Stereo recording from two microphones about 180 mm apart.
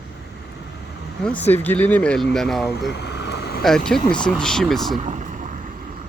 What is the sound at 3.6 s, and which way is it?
Speech, 5° left (ahead or behind).